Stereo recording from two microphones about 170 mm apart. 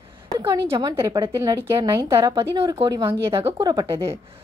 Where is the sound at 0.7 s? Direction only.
30° right (ahead or behind).